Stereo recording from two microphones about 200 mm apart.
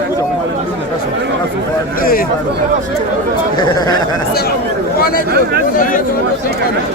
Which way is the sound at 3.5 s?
20° left (ahead or behind).